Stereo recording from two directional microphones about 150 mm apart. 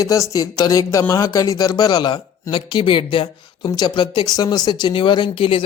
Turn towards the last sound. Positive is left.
turn(degrees=35)  # may be behind; listen again after turning